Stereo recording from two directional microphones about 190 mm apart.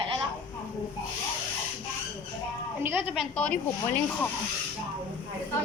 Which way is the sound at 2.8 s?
10° right (ahead or behind).